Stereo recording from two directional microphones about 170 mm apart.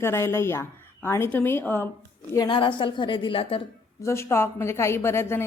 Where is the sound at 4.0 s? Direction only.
15° left (ahead or behind).